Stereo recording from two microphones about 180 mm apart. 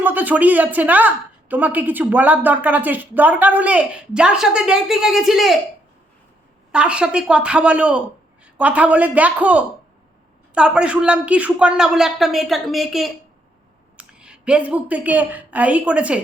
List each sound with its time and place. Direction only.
0.0 s a woman's voice: 10° right (ahead or behind)
6.7 s a woman's voice: 5° right (ahead or behind)